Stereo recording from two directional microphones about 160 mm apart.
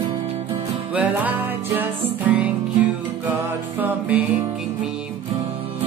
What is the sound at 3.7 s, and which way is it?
Music, 10° right (ahead or behind).